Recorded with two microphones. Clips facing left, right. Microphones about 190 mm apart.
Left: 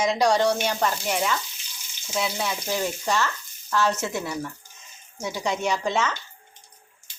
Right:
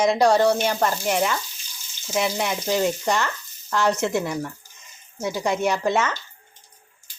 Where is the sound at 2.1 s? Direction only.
15° right (ahead or behind).